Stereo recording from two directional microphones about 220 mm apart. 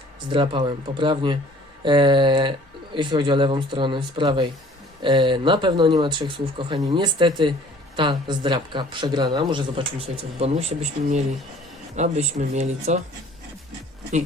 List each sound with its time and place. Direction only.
0.3 s speech: 20° right (ahead or behind)